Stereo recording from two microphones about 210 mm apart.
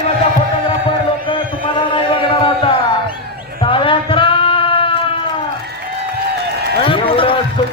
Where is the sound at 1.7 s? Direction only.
25° left (ahead or behind).